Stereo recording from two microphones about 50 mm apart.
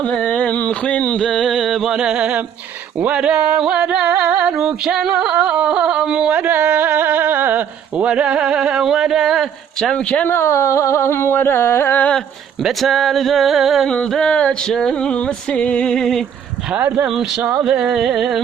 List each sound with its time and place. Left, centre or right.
0.3 s a sound: left; by 2.0 s centre
2.0 s singing: centre
4.1 s music: right
4.9 s singing: centre
6.3 s a sound: right
8.1 s speech: right; by 9.9 s centre
9.9 s speech: left
10.2 s carnatic music: left
12.8 s a sound: centre
14.2 s speech: left
14.7 s a sound: centre
16.7 s speech: right
17.7 s singing: centre